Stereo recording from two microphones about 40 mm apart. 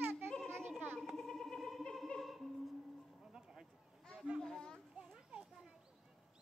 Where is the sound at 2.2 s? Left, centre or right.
Centre.